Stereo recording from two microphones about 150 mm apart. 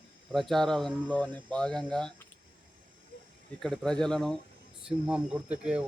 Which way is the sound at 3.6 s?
5° left (ahead or behind).